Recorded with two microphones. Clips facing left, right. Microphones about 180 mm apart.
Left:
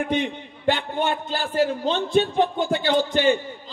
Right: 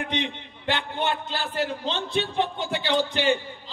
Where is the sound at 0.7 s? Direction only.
45° left (ahead or behind).